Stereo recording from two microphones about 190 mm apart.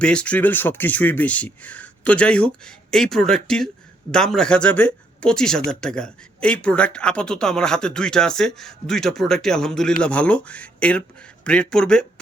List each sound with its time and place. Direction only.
0.0 s speech: 5° left (ahead or behind)